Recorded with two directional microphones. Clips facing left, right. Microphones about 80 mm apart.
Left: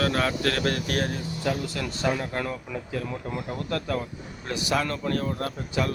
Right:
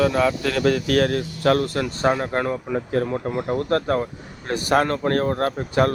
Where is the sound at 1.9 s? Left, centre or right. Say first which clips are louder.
Right 6 dB; right.